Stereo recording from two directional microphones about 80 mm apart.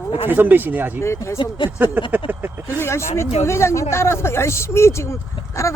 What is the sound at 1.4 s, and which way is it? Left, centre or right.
Speech, left.